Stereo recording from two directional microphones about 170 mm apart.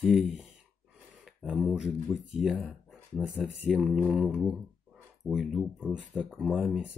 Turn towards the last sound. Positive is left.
turn(degrees=-5)  # may be behind; listen again after turning